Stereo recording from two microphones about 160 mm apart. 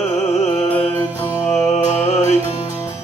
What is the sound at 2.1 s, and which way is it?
Music, 45° left (ahead or behind).